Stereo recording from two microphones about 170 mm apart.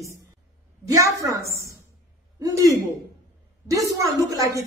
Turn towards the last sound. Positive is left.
turn(degrees=-20)  # may be behind; listen again after turning